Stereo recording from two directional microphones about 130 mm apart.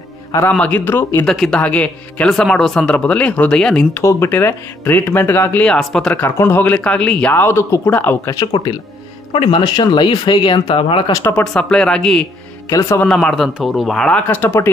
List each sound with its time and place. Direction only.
0.5 s speech: 10° left (ahead or behind)
1.2 s speech: centre (ahead or behind)
3.9 s speech: 20° left (ahead or behind); by 6.2 s 5° left (ahead or behind)
6.2 s speech: 15° left (ahead or behind)
9.3 s speech: 40° left (ahead or behind)
11.3 s speech: 5° left (ahead or behind)
12.6 s speech: 25° left (ahead or behind)
13.0 s speech: 5° left (ahead or behind)